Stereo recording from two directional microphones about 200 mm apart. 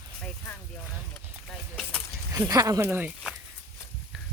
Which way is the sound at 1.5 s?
5° left (ahead or behind).